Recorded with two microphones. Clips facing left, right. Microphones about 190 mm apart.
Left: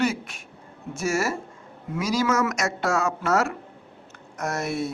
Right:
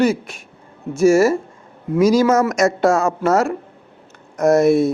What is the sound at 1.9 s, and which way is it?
A man's voice, 45° right (ahead or behind).